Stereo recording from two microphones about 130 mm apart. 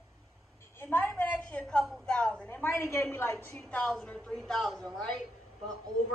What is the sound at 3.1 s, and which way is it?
A woman's voice, 15° left (ahead or behind).